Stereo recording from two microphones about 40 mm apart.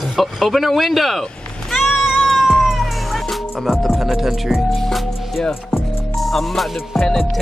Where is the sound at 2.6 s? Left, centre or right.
Centre.